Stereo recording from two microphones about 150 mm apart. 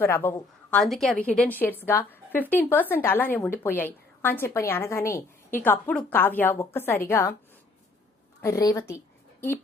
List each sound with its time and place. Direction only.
0.0 s a woman's voice: 15° left (ahead or behind)
0.8 s a woman's voice: centre (ahead or behind)
8.4 s a woman's voice: 20° left (ahead or behind)